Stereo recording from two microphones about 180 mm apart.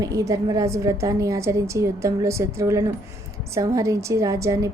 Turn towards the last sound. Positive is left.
turn(degrees=-20)  # may be behind; listen again after turning